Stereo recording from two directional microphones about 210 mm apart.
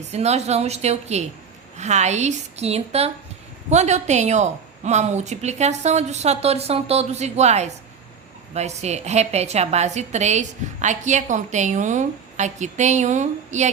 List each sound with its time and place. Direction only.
0.0 s a woman's voice: 30° right (ahead or behind)